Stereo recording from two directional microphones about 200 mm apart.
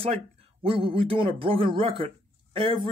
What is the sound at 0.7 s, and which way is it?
Speech, 25° right (ahead or behind).